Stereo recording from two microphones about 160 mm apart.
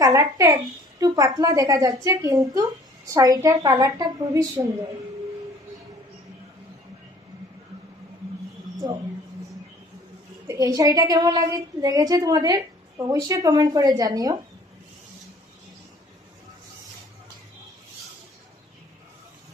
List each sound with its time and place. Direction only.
0.0 s a woman's voice: 20° right (ahead or behind)
10.4 s a woman's voice: 20° right (ahead or behind)